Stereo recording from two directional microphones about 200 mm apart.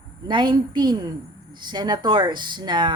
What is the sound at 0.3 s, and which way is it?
A woman's voice, 25° right (ahead or behind).